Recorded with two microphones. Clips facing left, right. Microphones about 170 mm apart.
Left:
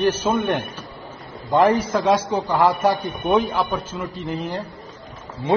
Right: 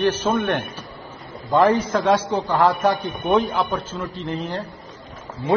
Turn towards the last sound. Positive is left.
turn(degrees=20)  # may be behind; listen again after turning